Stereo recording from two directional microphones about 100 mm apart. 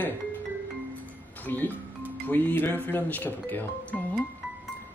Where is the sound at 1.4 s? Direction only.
20° left (ahead or behind).